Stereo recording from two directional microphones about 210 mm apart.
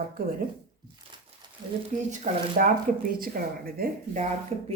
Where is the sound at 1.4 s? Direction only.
20° right (ahead or behind).